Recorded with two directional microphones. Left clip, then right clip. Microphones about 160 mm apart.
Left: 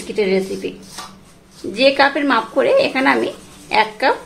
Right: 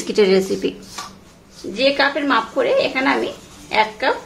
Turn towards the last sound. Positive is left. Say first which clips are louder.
# left 2 dB
turn(degrees=35)  # may be behind; listen again after turning